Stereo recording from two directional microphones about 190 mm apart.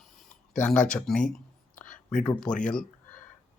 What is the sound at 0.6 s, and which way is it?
Speech, 5° left (ahead or behind).